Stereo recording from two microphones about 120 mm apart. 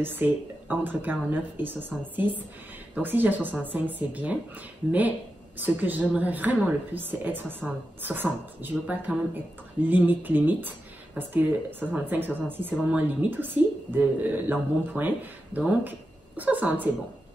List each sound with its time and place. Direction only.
0.0 s a woman's voice: 15° right (ahead or behind)
5.6 s a woman's voice: 15° right (ahead or behind)